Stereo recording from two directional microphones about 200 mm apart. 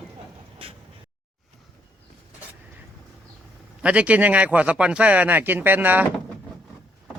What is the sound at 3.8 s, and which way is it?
Speech, 5° right (ahead or behind).